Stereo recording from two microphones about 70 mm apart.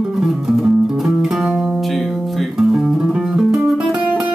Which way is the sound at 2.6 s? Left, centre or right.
Centre.